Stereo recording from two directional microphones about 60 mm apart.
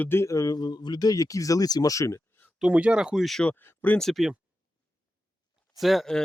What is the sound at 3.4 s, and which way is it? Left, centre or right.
Speech, left.